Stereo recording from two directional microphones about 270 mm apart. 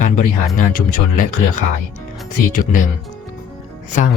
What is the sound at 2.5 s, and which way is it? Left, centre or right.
Speech, left.